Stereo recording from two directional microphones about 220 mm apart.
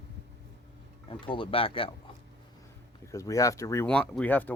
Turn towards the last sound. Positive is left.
turn(degrees=5)  # may be behind; listen again after turning